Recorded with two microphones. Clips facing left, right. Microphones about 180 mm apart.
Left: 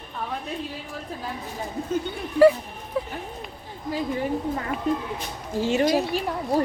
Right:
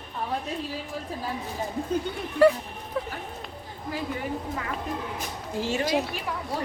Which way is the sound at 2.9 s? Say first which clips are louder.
Left 3 dB; 5° left (ahead or behind).